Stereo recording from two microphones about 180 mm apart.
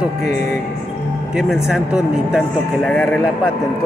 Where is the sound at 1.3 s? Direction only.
5° right (ahead or behind).